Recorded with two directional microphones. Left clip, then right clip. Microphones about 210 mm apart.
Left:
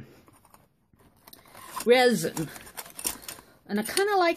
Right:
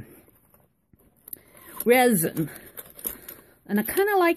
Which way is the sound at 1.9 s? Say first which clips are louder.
Right 1 dB; 35° right (ahead or behind).